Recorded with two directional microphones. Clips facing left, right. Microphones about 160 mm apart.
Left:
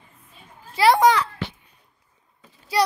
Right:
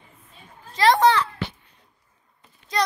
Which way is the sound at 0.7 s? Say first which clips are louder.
Left 1 dB; 10° left (ahead or behind).